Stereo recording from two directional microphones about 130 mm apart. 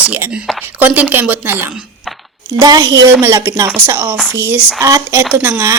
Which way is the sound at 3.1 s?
20° right (ahead or behind).